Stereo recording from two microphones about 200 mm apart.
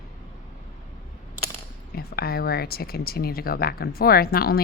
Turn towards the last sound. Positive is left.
turn(degrees=50)  # may be behind; listen again after turning